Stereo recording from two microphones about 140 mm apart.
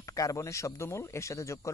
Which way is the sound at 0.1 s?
25° left (ahead or behind).